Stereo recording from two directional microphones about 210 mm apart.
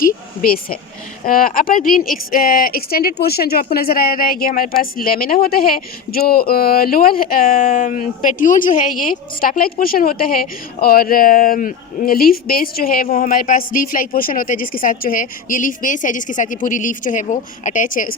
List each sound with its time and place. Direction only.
0.0 s speech: 45° left (ahead or behind)